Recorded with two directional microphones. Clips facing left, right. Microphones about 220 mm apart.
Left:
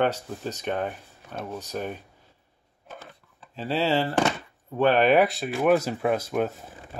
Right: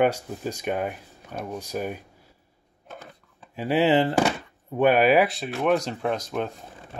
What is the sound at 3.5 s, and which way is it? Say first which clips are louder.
Speech: right 4 dB; 15° right (ahead or behind).